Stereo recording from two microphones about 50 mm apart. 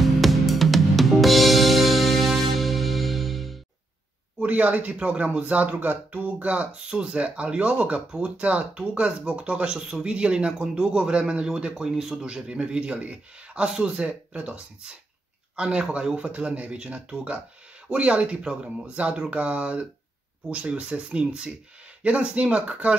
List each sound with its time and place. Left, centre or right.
0.0 s music: centre
4.4 s speech: right